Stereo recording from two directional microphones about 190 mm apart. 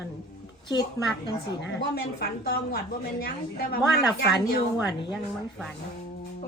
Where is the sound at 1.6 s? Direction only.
60° left (ahead or behind).